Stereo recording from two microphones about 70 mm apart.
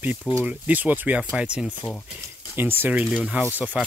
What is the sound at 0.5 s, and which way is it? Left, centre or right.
Speech, right.